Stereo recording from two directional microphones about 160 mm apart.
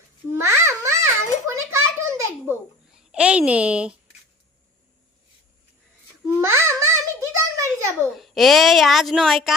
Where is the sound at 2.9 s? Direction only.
5° right (ahead or behind).